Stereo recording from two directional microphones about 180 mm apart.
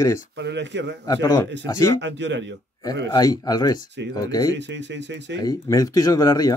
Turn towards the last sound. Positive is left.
turn(degrees=20)  # may be behind; listen again after turning